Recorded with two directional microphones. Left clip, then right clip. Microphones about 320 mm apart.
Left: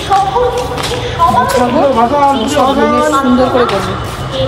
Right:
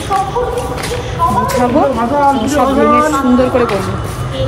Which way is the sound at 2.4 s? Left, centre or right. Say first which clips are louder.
Left 1 dB; centre.